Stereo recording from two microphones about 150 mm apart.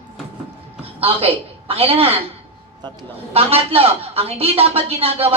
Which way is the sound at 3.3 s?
40° right (ahead or behind).